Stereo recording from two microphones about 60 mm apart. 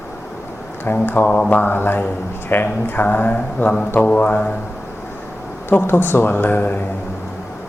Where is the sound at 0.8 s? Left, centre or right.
Left.